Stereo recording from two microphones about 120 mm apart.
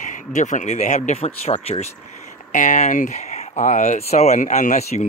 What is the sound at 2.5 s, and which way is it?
Speech, 90° left.